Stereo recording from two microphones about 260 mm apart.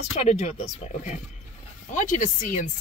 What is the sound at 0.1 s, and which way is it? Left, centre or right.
Speech, left.